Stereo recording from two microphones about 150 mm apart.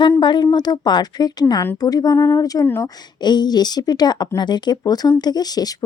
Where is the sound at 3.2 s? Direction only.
30° left (ahead or behind).